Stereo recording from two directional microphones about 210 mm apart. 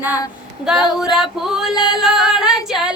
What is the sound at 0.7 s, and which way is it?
Female singing, centre (ahead or behind).